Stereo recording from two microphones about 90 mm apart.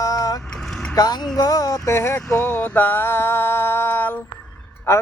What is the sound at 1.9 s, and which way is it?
Mantra, 30° left (ahead or behind).